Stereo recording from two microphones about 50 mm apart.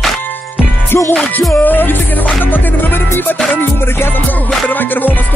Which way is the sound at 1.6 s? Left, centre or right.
Left.